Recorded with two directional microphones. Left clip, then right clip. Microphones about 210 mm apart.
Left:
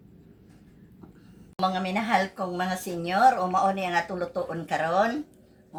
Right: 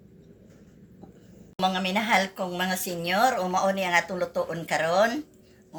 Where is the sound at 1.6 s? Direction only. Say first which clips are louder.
Right 1 dB; 10° left (ahead or behind).